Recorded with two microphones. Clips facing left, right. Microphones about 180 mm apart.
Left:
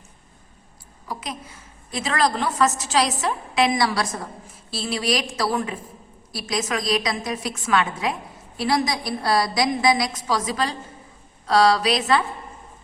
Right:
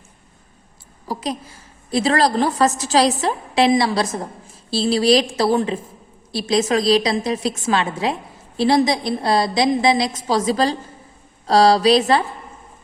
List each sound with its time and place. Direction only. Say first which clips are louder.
1.0 s a woman's voice: right 7 dB; 35° right (ahead or behind)